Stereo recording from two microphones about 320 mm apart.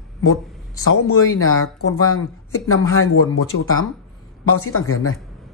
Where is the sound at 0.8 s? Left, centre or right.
Left.